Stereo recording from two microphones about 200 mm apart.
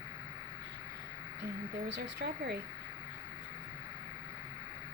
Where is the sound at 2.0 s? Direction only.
55° right (ahead or behind).